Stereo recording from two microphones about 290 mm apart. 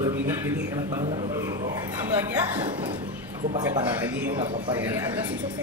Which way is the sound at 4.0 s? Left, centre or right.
Centre.